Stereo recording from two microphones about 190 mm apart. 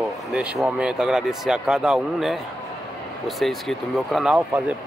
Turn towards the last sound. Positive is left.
turn(degrees=-5)  # may be behind; listen again after turning